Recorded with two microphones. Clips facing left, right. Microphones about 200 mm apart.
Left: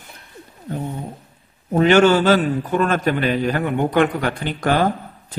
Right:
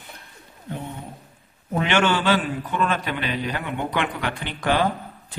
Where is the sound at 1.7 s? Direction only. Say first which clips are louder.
Left 8 dB; 40° left (ahead or behind).